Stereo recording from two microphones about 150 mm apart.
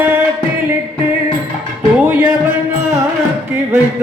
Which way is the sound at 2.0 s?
10° right (ahead or behind).